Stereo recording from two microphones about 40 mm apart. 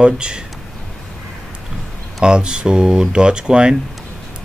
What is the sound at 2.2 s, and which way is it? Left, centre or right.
Speech, right.